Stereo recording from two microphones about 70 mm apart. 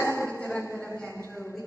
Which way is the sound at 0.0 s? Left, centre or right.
Left.